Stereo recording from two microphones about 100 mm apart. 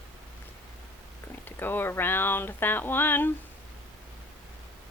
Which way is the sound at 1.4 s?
20° left (ahead or behind).